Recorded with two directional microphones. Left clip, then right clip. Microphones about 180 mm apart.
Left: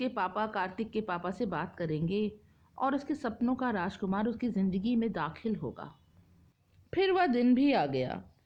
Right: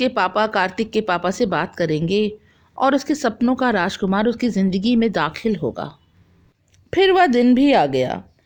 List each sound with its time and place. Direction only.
0.0 s speech: 45° right (ahead or behind)
6.9 s speech: 35° right (ahead or behind)